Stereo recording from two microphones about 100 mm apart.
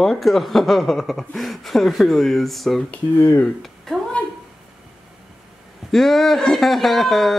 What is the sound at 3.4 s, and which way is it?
Speech, centre (ahead or behind).